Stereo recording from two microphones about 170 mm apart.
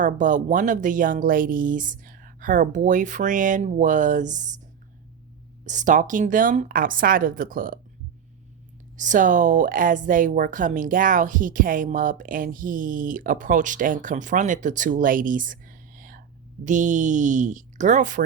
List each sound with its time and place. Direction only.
0.0 s a woman's voice: 50° right (ahead or behind)
5.6 s a woman's voice: 45° right (ahead or behind)
9.0 s a woman's voice: 50° right (ahead or behind)